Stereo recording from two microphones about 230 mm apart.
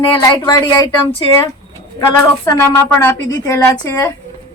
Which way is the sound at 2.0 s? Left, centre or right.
Centre.